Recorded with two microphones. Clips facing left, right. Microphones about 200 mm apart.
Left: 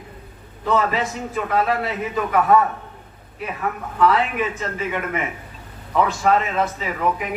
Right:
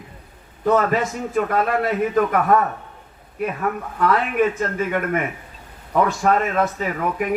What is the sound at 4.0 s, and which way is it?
A man's voice, 50° right (ahead or behind).